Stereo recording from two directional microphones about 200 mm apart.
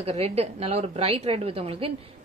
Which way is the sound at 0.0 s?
30° right (ahead or behind).